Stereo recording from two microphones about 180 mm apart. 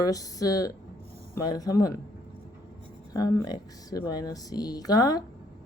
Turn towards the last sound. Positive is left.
turn(degrees=20)  # may be behind; listen again after turning